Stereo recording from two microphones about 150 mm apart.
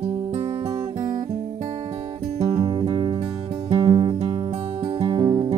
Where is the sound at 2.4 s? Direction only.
40° right (ahead or behind).